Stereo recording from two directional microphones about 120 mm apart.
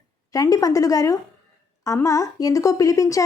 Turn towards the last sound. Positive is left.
turn(degrees=25)  # may be behind; listen again after turning